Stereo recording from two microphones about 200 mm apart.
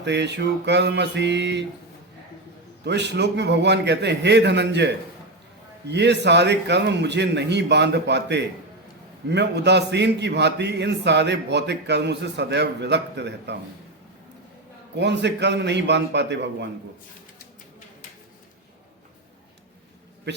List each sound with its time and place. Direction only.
0.0 s a man's voice: 60° right (ahead or behind)
2.8 s a man's voice: 60° right (ahead or behind)
14.9 s a man's voice: 60° right (ahead or behind)
20.3 s a man's voice: 55° right (ahead or behind)